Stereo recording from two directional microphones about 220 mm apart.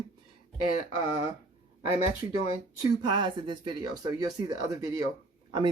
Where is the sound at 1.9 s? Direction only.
25° left (ahead or behind).